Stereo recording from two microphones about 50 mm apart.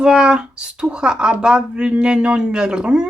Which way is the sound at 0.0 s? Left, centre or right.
Centre.